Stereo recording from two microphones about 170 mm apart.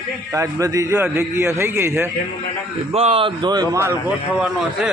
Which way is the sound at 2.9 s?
35° right (ahead or behind).